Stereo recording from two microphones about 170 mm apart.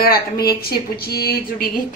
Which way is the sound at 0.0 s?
65° left (ahead or behind).